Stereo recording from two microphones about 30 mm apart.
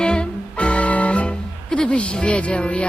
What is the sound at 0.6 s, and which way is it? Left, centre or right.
Music, left.